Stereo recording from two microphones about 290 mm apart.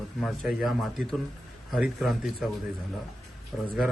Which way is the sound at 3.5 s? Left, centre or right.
Centre.